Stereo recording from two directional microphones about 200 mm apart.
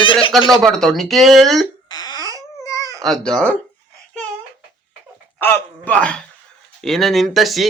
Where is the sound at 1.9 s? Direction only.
20° left (ahead or behind).